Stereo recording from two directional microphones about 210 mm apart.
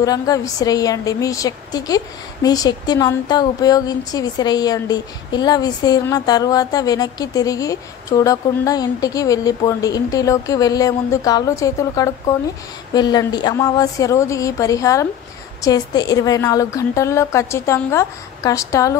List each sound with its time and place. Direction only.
0.0 s a woman's voice: 15° left (ahead or behind)